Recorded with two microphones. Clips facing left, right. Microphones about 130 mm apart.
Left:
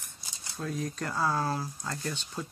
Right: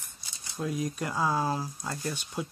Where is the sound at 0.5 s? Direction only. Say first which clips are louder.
Right 3 dB; 15° right (ahead or behind).